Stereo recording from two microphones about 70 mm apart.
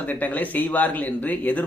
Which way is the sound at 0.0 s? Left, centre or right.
Left.